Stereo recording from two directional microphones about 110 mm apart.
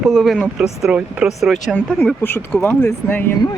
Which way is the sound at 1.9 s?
20° left (ahead or behind).